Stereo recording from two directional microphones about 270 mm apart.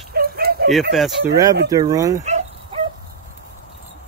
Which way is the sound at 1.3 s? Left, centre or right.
Centre.